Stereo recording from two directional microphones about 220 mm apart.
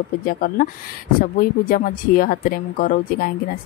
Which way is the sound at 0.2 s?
40° left (ahead or behind).